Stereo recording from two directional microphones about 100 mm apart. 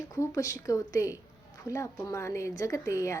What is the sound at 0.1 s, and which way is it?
A woman's voice, 35° left (ahead or behind).